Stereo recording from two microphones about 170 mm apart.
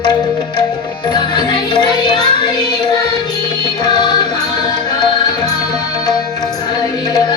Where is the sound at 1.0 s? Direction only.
25° left (ahead or behind).